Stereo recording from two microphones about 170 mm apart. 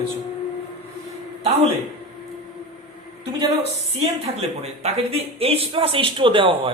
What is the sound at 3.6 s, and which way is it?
Speech, 35° right (ahead or behind).